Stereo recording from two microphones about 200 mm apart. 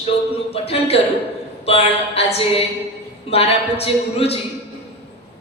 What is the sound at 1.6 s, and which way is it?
A man's voice, 30° left (ahead or behind).